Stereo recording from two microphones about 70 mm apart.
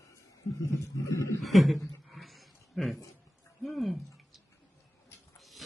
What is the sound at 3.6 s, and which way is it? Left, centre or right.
Speech, centre.